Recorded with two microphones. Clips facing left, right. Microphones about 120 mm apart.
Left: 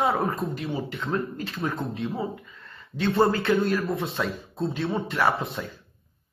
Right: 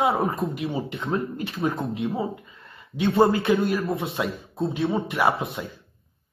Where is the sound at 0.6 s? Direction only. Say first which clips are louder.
Right 2 dB; 25° right (ahead or behind).